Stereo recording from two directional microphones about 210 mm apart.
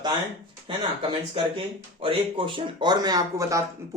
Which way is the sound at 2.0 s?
25° right (ahead or behind).